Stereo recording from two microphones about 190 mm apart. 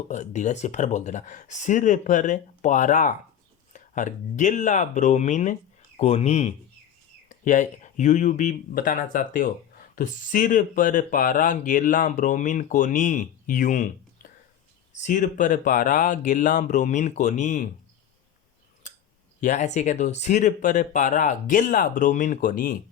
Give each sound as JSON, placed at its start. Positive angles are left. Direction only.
{"t": 0.1, "sound": "speech", "side_deg": 40}
{"t": 19.4, "sound": "speech", "side_deg": 40}